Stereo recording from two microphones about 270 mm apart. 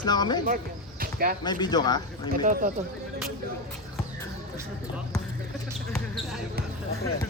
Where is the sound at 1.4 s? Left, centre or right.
Centre.